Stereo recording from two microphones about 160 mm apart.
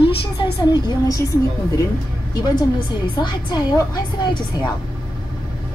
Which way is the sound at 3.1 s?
25° left (ahead or behind).